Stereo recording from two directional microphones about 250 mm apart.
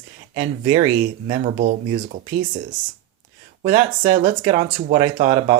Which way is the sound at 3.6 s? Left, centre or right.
Right.